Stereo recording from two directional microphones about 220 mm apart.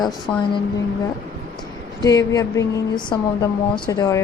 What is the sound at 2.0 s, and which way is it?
A woman's voice, 15° left (ahead or behind).